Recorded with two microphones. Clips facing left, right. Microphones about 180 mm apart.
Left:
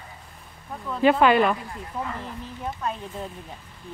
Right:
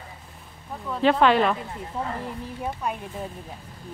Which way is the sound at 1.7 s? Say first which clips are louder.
Right 1 dB; 25° right (ahead or behind).